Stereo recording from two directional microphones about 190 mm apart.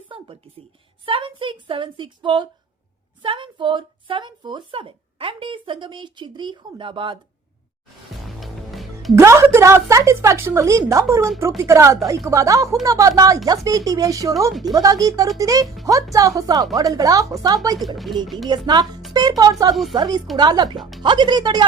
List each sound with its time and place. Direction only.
1.0 s a woman's voice: 25° right (ahead or behind)
8.4 s music: centre (ahead or behind)
9.1 s a woman's voice: 15° right (ahead or behind)
15.6 s speech: centre (ahead or behind)
16.1 s a woman's voice: 20° right (ahead or behind)
17.7 s speech: centre (ahead or behind)
18.4 s speech: 25° right (ahead or behind)
19.7 s speech: centre (ahead or behind)
20.0 s speech: 20° right (ahead or behind)